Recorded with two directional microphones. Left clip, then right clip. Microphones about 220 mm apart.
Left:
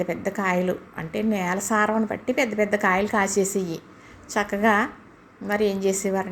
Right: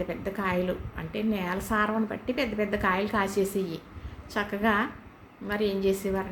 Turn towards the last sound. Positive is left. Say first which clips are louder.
# left 3 dB
turn(degrees=30)  # may be behind; listen again after turning